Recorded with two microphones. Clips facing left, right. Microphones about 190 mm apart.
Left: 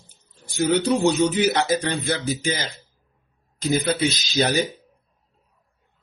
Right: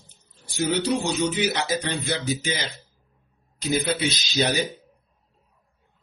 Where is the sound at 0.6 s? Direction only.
50° left (ahead or behind).